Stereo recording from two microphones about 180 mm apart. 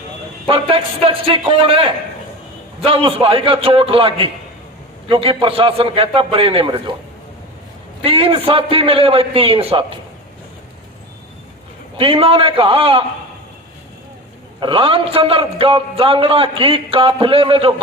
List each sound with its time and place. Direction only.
0.4 s a man's voice: 30° right (ahead or behind)
8.0 s a man's voice: 30° right (ahead or behind)
11.9 s a man's voice: 30° right (ahead or behind)
14.6 s a man's voice: 30° right (ahead or behind)